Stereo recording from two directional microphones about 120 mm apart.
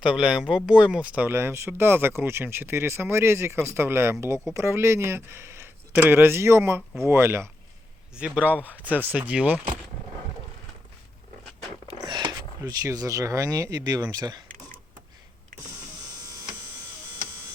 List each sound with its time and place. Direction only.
0.0 s speech: 10° right (ahead or behind)
8.1 s speech: 10° right (ahead or behind)
11.9 s a sound: 40° right (ahead or behind)
12.8 s speech: 30° right (ahead or behind)